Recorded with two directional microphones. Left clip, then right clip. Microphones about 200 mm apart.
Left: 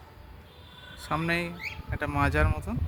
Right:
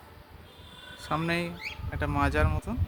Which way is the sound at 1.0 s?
Centre (ahead or behind).